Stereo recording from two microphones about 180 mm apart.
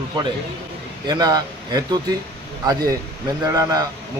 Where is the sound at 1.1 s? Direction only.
20° right (ahead or behind).